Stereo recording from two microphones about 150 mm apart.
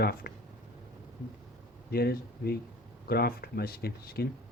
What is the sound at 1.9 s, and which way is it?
Speech, 90° left.